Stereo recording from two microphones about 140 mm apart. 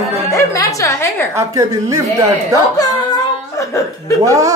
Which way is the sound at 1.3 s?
20° right (ahead or behind).